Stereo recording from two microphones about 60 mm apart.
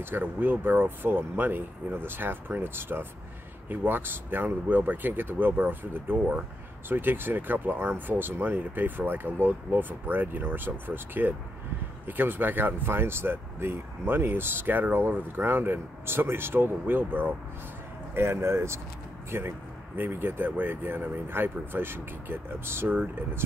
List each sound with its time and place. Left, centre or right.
0.0 s speech: right
18.1 s speech: right